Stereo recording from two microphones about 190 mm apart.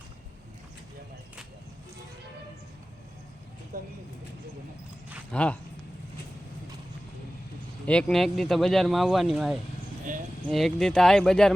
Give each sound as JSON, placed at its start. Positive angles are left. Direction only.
{"t": 3.7, "sound": "a sound", "side_deg": -45}
{"t": 5.3, "sound": "speech", "side_deg": 5}
{"t": 7.9, "sound": "speech", "side_deg": 5}